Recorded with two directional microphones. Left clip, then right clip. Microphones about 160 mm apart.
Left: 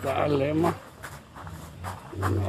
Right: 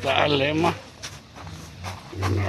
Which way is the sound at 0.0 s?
5° left (ahead or behind).